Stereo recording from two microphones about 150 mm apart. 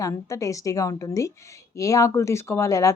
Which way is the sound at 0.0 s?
20° left (ahead or behind).